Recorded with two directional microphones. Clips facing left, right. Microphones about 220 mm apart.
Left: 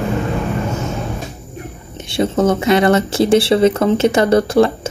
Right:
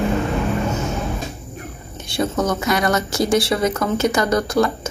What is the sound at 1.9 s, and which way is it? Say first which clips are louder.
A woman's voice: left 4 dB; 25° left (ahead or behind).